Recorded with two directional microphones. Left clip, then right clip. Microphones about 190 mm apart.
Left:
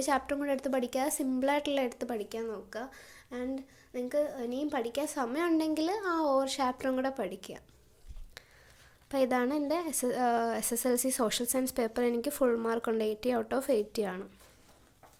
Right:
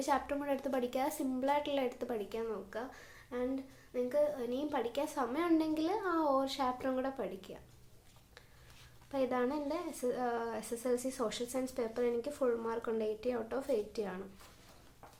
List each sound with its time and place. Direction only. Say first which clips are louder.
0.0 s a woman's voice: left 4 dB; 40° left (ahead or behind)
9.0 s a woman's voice: left 5 dB; 45° left (ahead or behind)